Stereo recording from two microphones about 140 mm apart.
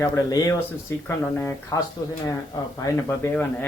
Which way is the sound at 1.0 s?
15° left (ahead or behind).